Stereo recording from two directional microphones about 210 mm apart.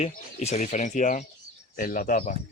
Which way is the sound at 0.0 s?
30° left (ahead or behind).